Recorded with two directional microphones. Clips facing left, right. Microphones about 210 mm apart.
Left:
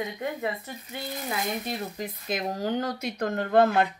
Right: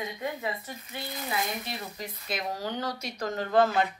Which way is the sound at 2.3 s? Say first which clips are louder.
Left 5 dB; 50° left (ahead or behind).